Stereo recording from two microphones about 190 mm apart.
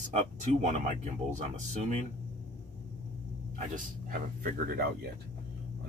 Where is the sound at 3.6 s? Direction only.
45° right (ahead or behind).